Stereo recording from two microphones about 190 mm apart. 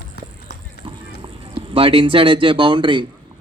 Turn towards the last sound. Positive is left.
turn(degrees=-25)  # may be behind; listen again after turning